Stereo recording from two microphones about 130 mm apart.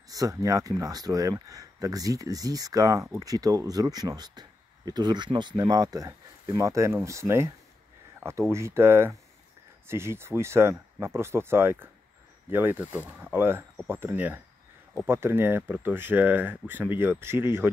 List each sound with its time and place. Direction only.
0.1 s speech: 25° right (ahead or behind)